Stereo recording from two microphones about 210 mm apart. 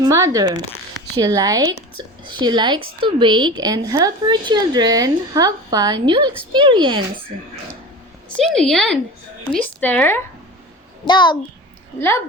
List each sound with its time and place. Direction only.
0.0 s a woman's voice: 15° right (ahead or behind)
8.5 s speech: centre (ahead or behind)
11.0 s a child's voice: 20° left (ahead or behind)